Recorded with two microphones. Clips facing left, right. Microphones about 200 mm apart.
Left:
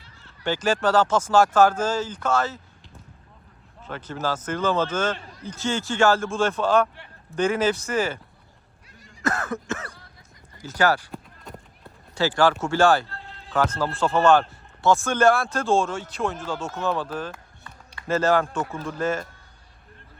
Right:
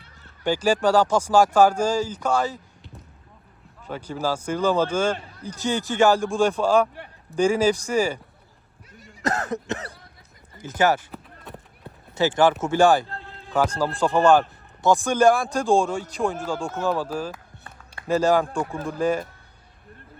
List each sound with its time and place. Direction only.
0.4 s a man's voice: 15° right (ahead or behind)
3.8 s a man's voice: 10° right (ahead or behind)
9.2 s cough: 35° right (ahead or behind)
10.6 s speech: 20° right (ahead or behind)
11.1 s clip-clop: centre (ahead or behind)
12.1 s a man's voice: 20° right (ahead or behind)
16.6 s a man's voice: centre (ahead or behind)